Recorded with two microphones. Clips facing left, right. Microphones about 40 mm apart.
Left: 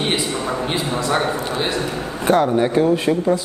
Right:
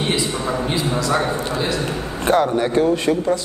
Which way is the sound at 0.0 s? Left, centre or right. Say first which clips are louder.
Even; left.